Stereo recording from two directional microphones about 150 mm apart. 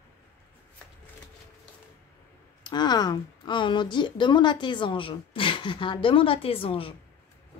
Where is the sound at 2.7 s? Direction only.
30° left (ahead or behind).